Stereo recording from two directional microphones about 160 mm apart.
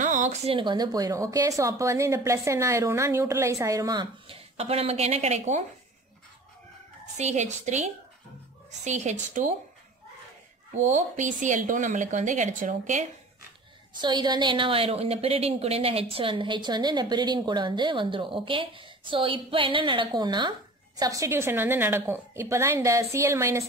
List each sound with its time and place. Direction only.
0.0 s a sound: 50° right (ahead or behind)
0.5 s speech: 30° right (ahead or behind)
7.2 s speech: 45° right (ahead or behind)
10.8 s speech: 50° right (ahead or behind)
14.0 s a woman's voice: 25° right (ahead or behind)